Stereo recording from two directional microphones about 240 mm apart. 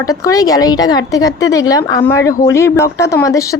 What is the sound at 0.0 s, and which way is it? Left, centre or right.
A woman's voice, centre.